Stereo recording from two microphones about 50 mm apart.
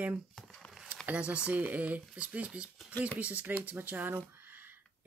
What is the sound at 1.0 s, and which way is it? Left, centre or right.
Speech, right.